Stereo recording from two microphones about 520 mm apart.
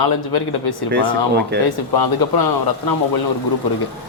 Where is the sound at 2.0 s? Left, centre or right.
Left.